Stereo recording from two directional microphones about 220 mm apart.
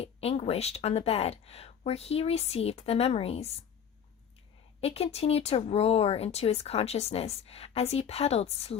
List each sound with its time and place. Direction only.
0.0 s speech: 30° left (ahead or behind)
4.8 s speech: 25° left (ahead or behind)